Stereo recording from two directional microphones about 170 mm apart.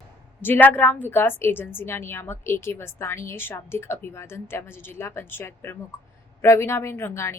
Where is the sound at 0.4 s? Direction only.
10° left (ahead or behind).